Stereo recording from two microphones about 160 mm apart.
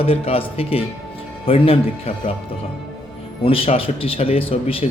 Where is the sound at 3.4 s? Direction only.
35° left (ahead or behind).